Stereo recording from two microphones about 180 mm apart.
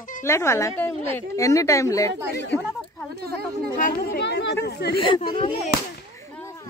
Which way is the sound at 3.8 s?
60° left (ahead or behind).